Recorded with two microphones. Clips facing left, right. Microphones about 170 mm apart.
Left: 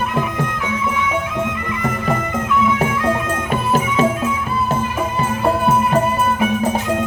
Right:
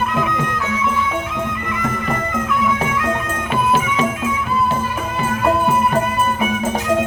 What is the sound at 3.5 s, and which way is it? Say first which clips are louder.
Music: right 2 dB; 45° left (ahead or behind).